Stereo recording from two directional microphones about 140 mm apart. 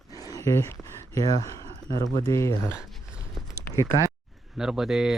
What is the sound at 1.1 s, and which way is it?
Speech, 25° left (ahead or behind).